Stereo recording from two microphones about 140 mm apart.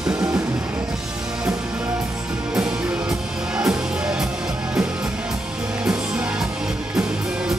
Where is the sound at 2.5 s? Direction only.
5° right (ahead or behind).